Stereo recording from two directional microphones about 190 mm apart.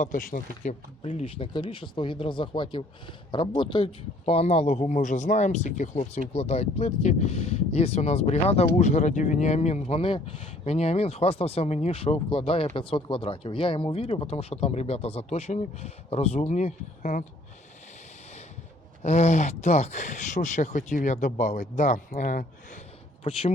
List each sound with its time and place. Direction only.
0.0 s speech: 45° left (ahead or behind)
19.0 s speech: 40° left (ahead or behind)
23.2 s speech: 30° left (ahead or behind)